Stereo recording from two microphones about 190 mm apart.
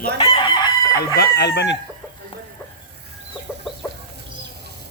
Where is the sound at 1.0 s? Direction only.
60° left (ahead or behind).